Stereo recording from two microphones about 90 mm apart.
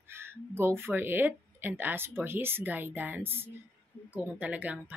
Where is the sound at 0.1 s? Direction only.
25° right (ahead or behind).